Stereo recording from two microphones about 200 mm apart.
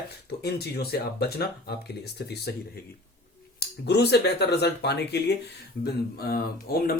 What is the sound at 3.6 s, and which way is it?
Speech, 55° left (ahead or behind).